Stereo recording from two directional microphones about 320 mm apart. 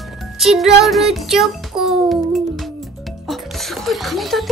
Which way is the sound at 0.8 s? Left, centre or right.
Centre.